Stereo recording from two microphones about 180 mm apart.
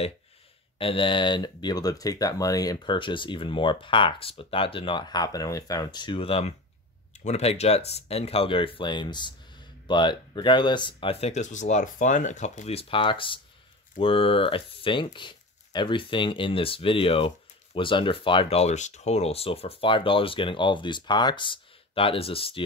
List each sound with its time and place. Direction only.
0.7 s speech: 30° left (ahead or behind)